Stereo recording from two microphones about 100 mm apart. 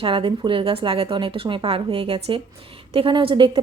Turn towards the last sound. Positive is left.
turn(degrees=-60)  # may be behind; listen again after turning